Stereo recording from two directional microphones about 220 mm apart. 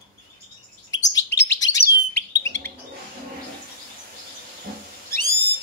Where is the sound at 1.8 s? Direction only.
50° left (ahead or behind).